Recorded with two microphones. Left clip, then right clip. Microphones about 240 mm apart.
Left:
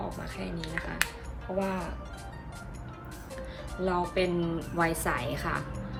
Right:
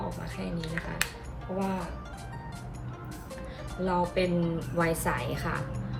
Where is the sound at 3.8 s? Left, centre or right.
Centre.